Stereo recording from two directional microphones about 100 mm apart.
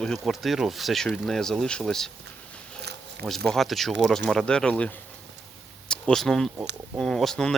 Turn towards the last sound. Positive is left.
turn(degrees=5)  # may be behind; listen again after turning